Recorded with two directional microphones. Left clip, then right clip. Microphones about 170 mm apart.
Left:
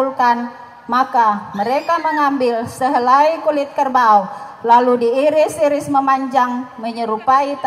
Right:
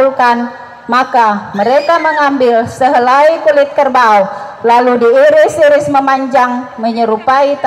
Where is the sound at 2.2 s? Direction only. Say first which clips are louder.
Right 7 dB; 30° right (ahead or behind).